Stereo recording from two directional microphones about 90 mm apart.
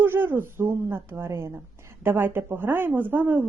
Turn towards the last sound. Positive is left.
turn(degrees=-20)  # may be behind; listen again after turning